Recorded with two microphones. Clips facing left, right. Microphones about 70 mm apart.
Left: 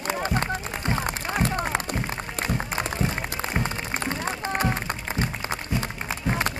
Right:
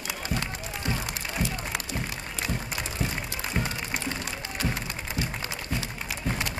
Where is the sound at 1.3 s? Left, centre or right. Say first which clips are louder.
Left 7 dB; left.